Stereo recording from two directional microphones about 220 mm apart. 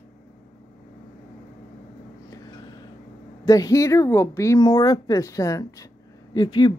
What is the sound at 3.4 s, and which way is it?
A woman's voice, 15° left (ahead or behind).